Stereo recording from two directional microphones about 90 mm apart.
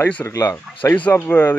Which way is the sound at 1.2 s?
20° left (ahead or behind).